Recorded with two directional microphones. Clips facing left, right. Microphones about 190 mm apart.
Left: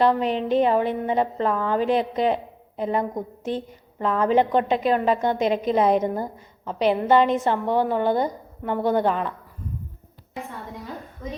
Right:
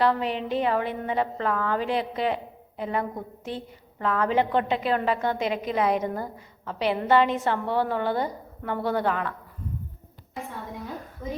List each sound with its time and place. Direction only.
0.0 s a woman's voice: 20° left (ahead or behind)